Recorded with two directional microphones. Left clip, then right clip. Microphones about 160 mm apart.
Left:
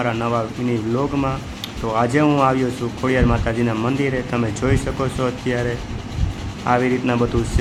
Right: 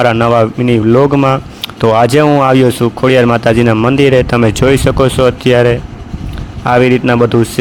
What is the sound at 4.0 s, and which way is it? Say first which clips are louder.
A man's voice: right 13 dB; 85° right.